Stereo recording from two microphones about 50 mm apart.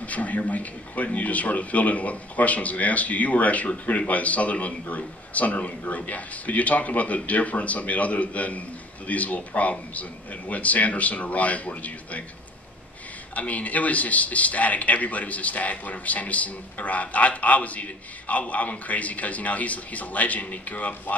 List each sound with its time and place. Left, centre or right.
0.1 s a man's voice: left
13.3 s a man's voice: left